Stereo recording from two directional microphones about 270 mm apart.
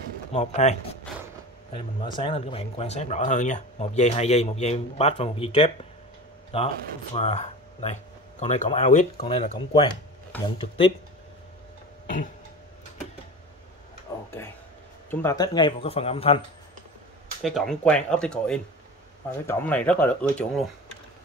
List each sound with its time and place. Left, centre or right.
0.3 s speech: left
14.1 s a sound: centre
15.0 s speech: centre
17.4 s speech: centre